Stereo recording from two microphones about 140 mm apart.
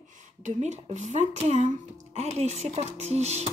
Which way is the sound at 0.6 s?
55° right (ahead or behind).